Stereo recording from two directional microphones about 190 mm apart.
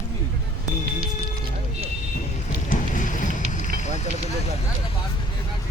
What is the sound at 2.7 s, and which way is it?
Vehicle, 45° left (ahead or behind).